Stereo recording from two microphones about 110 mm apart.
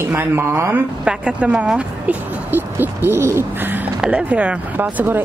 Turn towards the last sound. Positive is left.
turn(degrees=-15)  # may be behind; listen again after turning